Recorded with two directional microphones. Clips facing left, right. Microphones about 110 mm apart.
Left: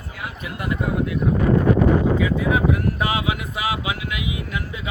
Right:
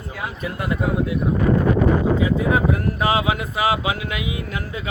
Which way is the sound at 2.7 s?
30° right (ahead or behind).